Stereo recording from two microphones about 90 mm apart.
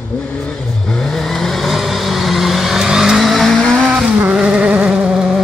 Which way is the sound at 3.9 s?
15° right (ahead or behind).